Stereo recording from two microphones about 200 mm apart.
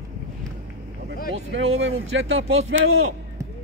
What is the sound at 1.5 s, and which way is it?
Speech, 80° right.